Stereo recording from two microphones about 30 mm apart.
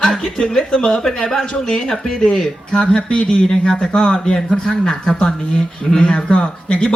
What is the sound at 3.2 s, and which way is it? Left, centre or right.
Speech, left.